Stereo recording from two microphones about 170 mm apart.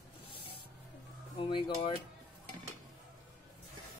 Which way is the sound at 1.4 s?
30° left (ahead or behind).